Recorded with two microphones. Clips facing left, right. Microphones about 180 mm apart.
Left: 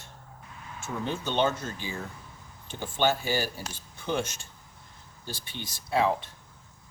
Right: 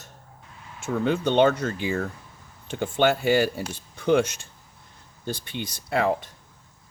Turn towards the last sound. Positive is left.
turn(degrees=-55)  # may be behind; listen again after turning